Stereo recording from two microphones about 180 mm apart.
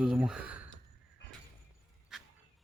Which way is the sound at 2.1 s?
5° right (ahead or behind).